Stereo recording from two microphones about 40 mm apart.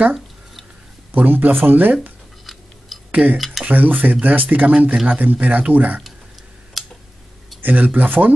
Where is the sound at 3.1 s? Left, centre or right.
Right.